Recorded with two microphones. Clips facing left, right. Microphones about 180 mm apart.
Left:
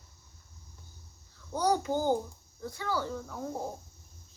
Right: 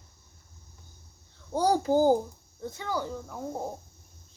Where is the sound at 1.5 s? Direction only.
30° right (ahead or behind).